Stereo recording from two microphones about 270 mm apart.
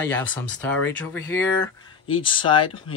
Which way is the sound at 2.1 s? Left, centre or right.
Centre.